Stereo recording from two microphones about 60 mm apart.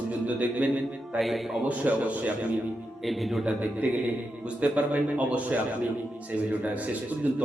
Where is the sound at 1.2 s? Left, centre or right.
Centre.